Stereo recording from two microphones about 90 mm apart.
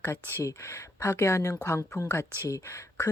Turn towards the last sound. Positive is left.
turn(degrees=30)  # may be behind; listen again after turning